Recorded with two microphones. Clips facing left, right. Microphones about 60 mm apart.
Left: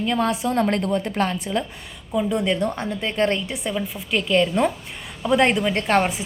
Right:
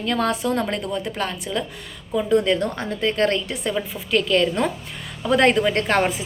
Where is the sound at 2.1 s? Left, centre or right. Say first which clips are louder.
Right 3 dB; centre.